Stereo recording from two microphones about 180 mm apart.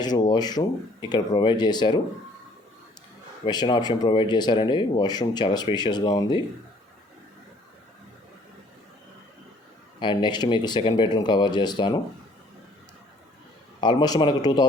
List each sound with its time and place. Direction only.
0.0 s speech: 20° left (ahead or behind)
3.4 s speech: 25° left (ahead or behind)
10.0 s speech: 25° left (ahead or behind)
13.8 s speech: 25° left (ahead or behind)